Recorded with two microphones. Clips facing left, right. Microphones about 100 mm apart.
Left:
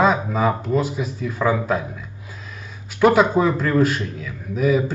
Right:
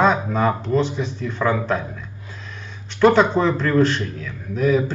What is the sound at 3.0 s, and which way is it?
Speech, 10° left (ahead or behind).